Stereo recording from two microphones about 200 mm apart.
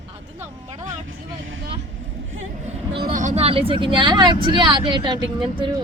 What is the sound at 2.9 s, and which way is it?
Speech, 45° right (ahead or behind).